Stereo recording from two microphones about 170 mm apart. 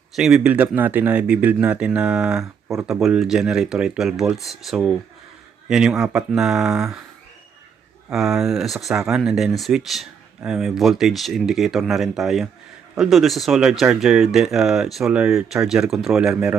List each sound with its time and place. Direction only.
0.2 s speech: 5° right (ahead or behind)
8.1 s speech: centre (ahead or behind)